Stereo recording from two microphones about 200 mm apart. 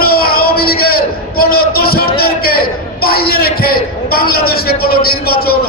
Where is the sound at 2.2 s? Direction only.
50° left (ahead or behind).